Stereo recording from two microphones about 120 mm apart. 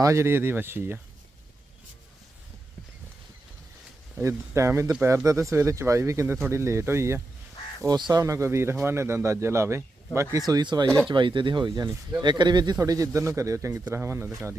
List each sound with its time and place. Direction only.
0.0 s speech: 25° right (ahead or behind)
4.2 s speech: 25° right (ahead or behind)
7.8 s speech: 35° right (ahead or behind)
10.8 s speech: 5° left (ahead or behind)
11.1 s speech: 40° right (ahead or behind); by 14.3 s 20° right (ahead or behind)